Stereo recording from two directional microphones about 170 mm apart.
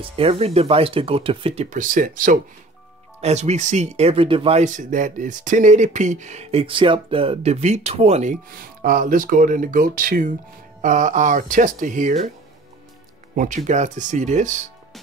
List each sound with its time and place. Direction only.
0.0 s speech: 35° right (ahead or behind); by 2.4 s 50° right (ahead or behind)
3.2 s speech: 40° right (ahead or behind)
4.6 s speech: 50° right (ahead or behind)
8.5 s speech: 55° right (ahead or behind)
13.7 s speech: 45° right (ahead or behind)